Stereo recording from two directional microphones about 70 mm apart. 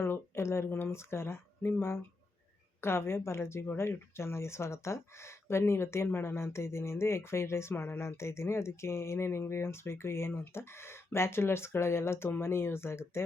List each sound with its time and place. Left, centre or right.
0.0 s speech: left
2.8 s speech: left